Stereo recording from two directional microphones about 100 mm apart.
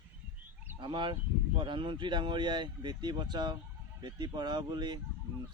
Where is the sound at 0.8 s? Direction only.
50° right (ahead or behind).